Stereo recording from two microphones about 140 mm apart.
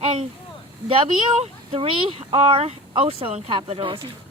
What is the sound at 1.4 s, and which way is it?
Speech, 45° right (ahead or behind).